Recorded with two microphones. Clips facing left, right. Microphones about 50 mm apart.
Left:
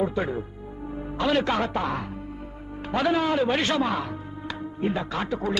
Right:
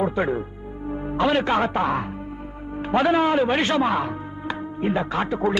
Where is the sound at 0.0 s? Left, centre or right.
Centre.